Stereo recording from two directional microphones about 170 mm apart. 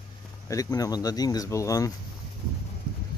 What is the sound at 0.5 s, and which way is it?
Speech, 20° left (ahead or behind).